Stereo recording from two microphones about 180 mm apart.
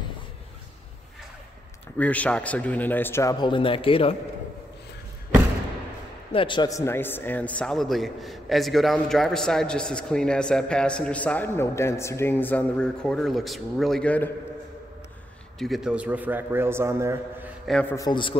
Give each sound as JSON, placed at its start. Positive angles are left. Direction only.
{"t": 2.0, "sound": "a man's voice", "side_deg": 10}
{"t": 6.3, "sound": "a man's voice", "side_deg": 25}
{"t": 15.6, "sound": "a man's voice", "side_deg": 0}
{"t": 17.6, "sound": "a man's voice", "side_deg": 5}
{"t": 17.9, "sound": "a man's voice", "side_deg": 25}